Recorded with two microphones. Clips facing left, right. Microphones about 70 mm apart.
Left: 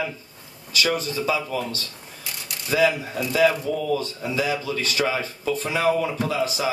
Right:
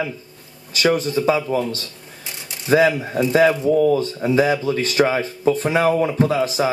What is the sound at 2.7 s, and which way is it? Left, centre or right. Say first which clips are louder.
Speech: right 5 dB; right.